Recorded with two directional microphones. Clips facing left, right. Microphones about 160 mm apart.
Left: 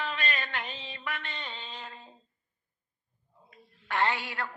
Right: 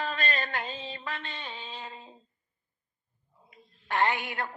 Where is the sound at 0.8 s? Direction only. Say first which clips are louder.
Right 1 dB; 25° right (ahead or behind).